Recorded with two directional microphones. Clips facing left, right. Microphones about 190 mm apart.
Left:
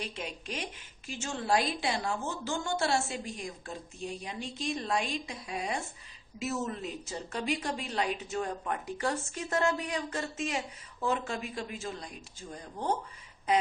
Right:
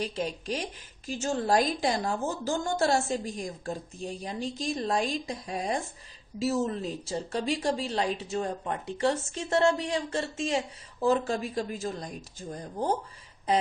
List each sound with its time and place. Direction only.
0.0 s a woman's voice: 35° right (ahead or behind)